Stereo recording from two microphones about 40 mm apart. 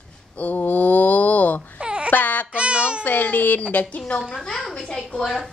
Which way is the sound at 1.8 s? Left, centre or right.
Right.